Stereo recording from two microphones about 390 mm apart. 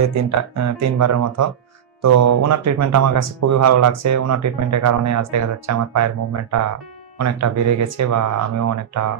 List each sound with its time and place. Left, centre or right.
0.1 s speech: right